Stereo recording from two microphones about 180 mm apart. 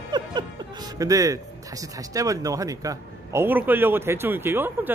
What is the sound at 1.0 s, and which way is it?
A man's voice, 20° right (ahead or behind).